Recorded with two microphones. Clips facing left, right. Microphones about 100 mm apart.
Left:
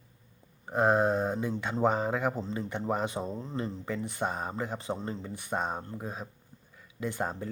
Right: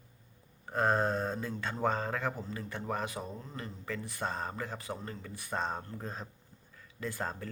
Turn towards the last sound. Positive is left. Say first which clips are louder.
# left 4 dB
turn(degrees=20)  # may be behind; listen again after turning